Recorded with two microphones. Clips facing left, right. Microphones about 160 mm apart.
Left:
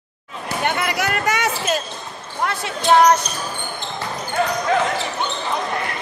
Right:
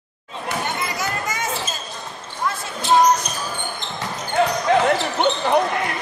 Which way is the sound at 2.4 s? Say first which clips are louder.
Left 3 dB; 75° left (ahead or behind).